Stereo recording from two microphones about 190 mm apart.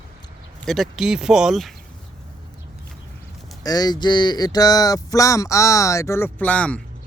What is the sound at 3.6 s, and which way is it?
Speech, 20° left (ahead or behind).